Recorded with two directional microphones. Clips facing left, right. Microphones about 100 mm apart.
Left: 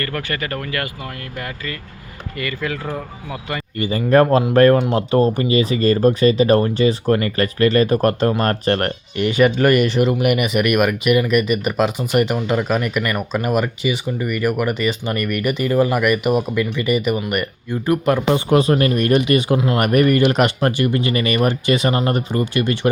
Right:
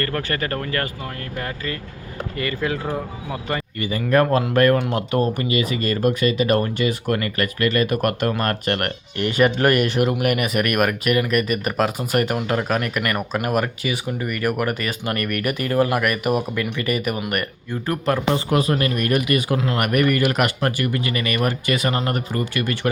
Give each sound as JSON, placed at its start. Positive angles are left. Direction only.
{"t": 0.1, "sound": "speech", "side_deg": -35}
{"t": 2.4, "sound": "speech", "side_deg": -30}
{"t": 3.8, "sound": "speech", "side_deg": 30}
{"t": 9.3, "sound": "speech", "side_deg": 0}